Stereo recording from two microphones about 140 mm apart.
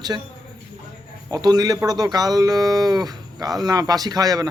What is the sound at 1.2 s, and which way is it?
A man's voice, 30° right (ahead or behind).